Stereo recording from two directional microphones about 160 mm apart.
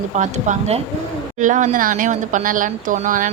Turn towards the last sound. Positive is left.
turn(degrees=-55)  # may be behind; listen again after turning